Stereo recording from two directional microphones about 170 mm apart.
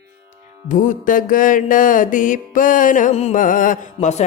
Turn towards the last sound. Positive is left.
turn(degrees=50)  # may be behind; listen again after turning